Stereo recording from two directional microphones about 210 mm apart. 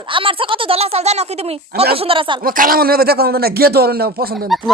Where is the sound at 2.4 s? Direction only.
45° right (ahead or behind).